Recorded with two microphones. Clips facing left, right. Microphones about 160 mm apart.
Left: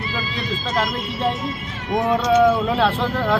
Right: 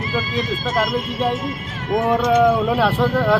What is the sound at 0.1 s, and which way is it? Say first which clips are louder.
Speech: right 7 dB; 45° right (ahead or behind).